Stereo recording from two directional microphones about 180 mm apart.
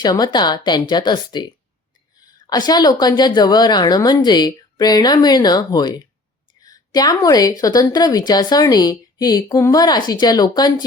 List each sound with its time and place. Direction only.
0.0 s a woman's voice: 25° left (ahead or behind)
2.5 s a woman's voice: 20° left (ahead or behind)